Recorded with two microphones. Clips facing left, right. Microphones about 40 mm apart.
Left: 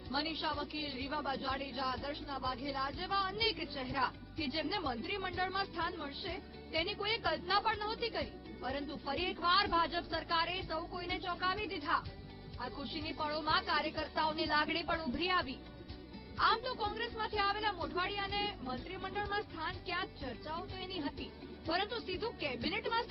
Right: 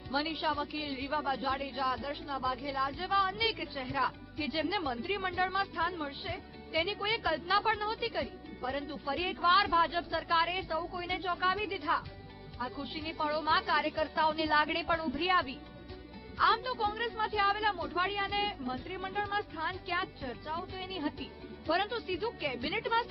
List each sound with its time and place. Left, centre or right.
0.1 s a woman's voice: centre
16.6 s speech: centre